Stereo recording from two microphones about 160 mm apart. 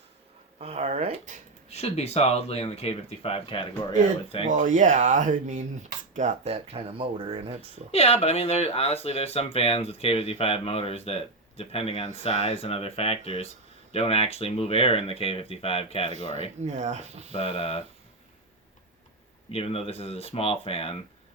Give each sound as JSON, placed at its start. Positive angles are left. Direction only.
{"t": 0.6, "sound": "speech", "side_deg": -40}
{"t": 1.7, "sound": "speech", "side_deg": 40}
{"t": 4.4, "sound": "speech", "side_deg": -50}
{"t": 7.9, "sound": "speech", "side_deg": 40}
{"t": 16.6, "sound": "speech", "side_deg": -45}
{"t": 17.3, "sound": "speech", "side_deg": 40}
{"t": 19.5, "sound": "speech", "side_deg": 35}